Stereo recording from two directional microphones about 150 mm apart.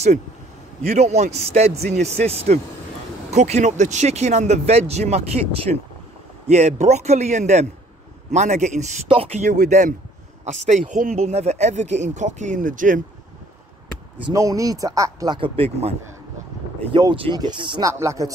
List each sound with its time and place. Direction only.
0.8 s speech: 50° right (ahead or behind)
9.1 s speech: 40° right (ahead or behind)
9.7 s speech: 55° right (ahead or behind)
14.3 s speech: 20° right (ahead or behind); by 15.9 s 40° right (ahead or behind)
16.9 s speech: 35° right (ahead or behind)